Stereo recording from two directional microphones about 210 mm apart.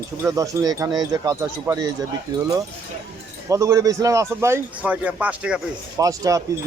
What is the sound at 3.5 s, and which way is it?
Speech, 15° right (ahead or behind).